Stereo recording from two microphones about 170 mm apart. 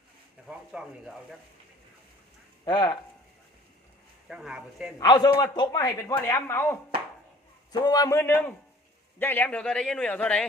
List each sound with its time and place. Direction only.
0.4 s speech: 5° right (ahead or behind)
2.6 s a man's voice: 25° left (ahead or behind)
4.3 s speech: 5° right (ahead or behind)
4.9 s a man's voice: 25° left (ahead or behind); by 10.4 s 5° left (ahead or behind)